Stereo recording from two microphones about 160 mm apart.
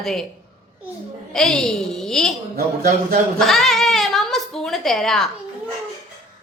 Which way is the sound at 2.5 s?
65° right (ahead or behind).